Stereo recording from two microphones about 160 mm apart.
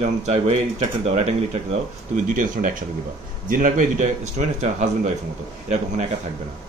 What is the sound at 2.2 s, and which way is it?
Speech, 55° right (ahead or behind).